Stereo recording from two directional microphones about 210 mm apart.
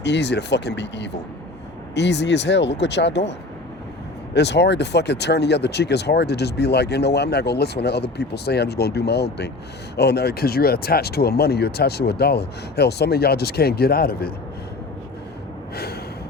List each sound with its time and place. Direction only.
0.0 s speech: 55° left (ahead or behind)
4.4 s speech: 55° left (ahead or behind)
15.7 s gasp: 50° left (ahead or behind)